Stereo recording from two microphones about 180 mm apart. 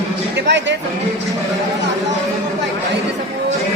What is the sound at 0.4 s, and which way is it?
Speech, 75° right (ahead or behind).